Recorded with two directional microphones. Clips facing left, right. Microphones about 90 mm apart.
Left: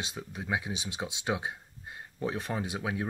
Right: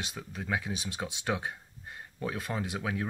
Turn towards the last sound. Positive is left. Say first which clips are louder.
# even
turn(degrees=20)  # may be behind; listen again after turning